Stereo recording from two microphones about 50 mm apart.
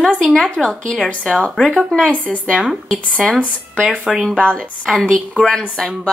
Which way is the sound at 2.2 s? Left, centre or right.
Left.